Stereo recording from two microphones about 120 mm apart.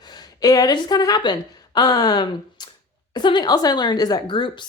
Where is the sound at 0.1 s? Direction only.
35° left (ahead or behind).